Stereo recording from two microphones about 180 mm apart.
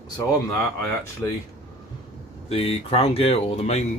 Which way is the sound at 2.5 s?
35° left (ahead or behind).